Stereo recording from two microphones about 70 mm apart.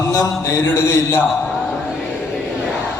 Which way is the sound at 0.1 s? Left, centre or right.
Left.